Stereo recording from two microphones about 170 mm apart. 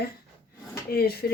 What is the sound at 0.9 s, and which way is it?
Speech, 65° left (ahead or behind).